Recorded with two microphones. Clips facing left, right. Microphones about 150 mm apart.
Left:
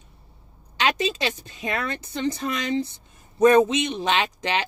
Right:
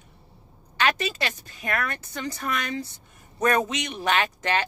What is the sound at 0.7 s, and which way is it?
A man's voice, 20° left (ahead or behind).